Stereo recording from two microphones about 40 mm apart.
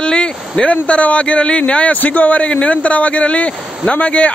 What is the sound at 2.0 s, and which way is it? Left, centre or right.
Speech, left.